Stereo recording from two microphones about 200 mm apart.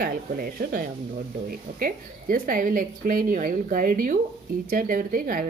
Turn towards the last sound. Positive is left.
turn(degrees=-45)  # may be behind; listen again after turning